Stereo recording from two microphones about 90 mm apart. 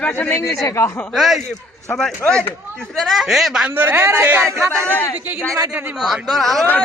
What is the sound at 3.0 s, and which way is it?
Speech, 5° right (ahead or behind).